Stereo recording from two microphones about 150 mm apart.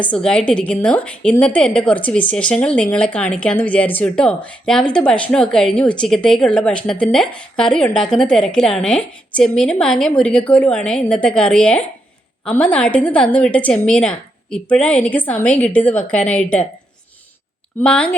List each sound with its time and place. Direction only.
0.1 s a woman's voice: 5° left (ahead or behind)
17.7 s a woman's voice: 10° left (ahead or behind)